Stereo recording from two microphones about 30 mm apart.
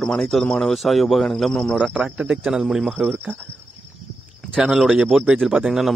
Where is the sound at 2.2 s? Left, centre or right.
Right.